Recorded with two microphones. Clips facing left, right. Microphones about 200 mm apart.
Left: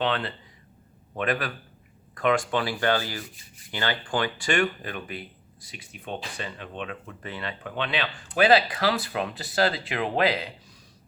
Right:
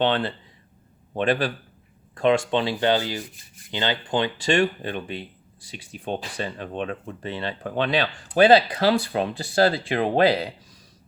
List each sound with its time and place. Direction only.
0.0 s speech: 30° right (ahead or behind)
8.3 s speech: 25° right (ahead or behind)